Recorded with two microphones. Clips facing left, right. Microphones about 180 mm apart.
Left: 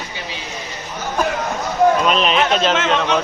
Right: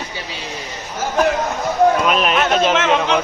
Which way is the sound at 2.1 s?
10° right (ahead or behind).